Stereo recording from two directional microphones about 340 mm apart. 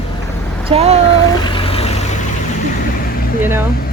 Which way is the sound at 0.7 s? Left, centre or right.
Centre.